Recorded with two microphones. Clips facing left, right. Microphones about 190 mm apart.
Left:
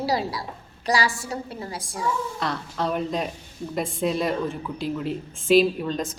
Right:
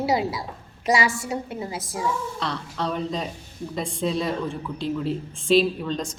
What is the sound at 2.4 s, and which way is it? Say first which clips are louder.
Speech: left 1 dB; centre (ahead or behind).